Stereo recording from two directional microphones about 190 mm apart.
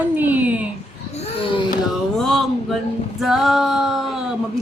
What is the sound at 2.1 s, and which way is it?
Speech, centre (ahead or behind).